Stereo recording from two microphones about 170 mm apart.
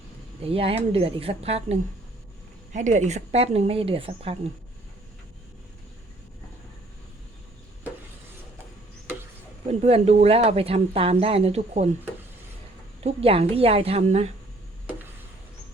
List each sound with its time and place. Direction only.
0.4 s speech: 35° right (ahead or behind)
9.8 s speech: 40° right (ahead or behind)
13.0 s speech: 35° right (ahead or behind)